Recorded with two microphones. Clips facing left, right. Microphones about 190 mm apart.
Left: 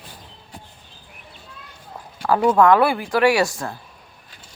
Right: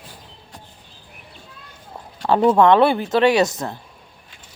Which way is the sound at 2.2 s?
25° right (ahead or behind).